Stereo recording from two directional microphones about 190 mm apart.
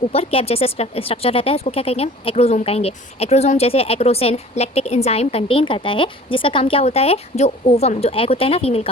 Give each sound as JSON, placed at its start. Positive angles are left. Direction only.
{"t": 0.1, "sound": "speech", "side_deg": 30}